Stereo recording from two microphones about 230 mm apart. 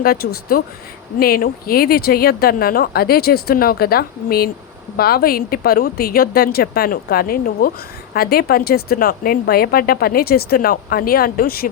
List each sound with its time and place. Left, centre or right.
0.0 s speech: left